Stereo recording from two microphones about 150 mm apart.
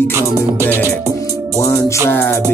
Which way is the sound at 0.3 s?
20° right (ahead or behind).